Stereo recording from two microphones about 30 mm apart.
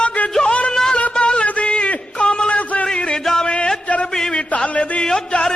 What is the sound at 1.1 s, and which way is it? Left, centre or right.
Music, left.